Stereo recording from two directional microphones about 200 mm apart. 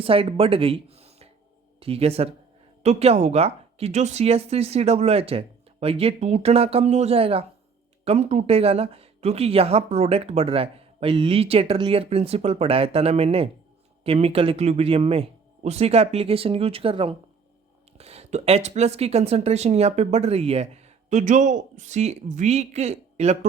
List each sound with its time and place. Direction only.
0.0 s speech: 30° right (ahead or behind)